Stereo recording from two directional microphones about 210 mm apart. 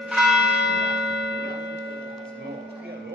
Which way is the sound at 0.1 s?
Centre (ahead or behind).